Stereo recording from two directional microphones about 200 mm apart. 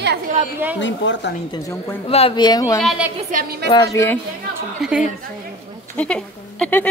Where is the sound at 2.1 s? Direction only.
30° left (ahead or behind).